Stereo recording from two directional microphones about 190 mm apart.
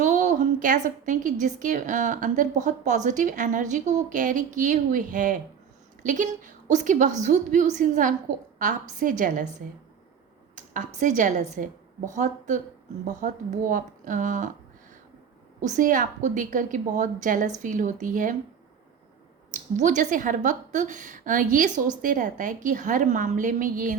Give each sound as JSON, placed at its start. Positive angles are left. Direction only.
{"t": 0.0, "sound": "a woman's voice", "side_deg": -40}
{"t": 10.5, "sound": "a woman's voice", "side_deg": -40}
{"t": 15.6, "sound": "a woman's voice", "side_deg": -40}
{"t": 19.5, "sound": "a woman's voice", "side_deg": -40}